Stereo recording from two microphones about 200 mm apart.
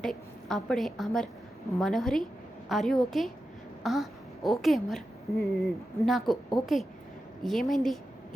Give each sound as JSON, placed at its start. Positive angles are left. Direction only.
{"t": 0.0, "sound": "a woman's voice", "side_deg": 0}